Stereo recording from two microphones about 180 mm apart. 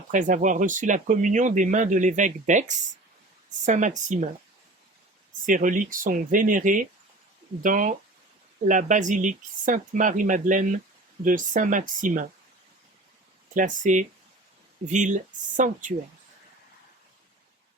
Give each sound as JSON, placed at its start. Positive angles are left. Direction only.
{"t": 0.1, "sound": "speech", "side_deg": -45}
{"t": 5.5, "sound": "speech", "side_deg": -45}
{"t": 13.5, "sound": "speech", "side_deg": -45}